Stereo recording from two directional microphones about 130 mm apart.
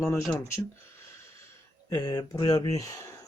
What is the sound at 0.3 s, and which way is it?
Speech, 20° left (ahead or behind).